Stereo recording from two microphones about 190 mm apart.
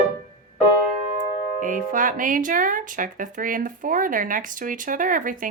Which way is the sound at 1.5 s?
45° right (ahead or behind).